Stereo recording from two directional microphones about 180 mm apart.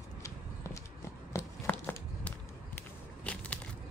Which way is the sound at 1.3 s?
10° left (ahead or behind).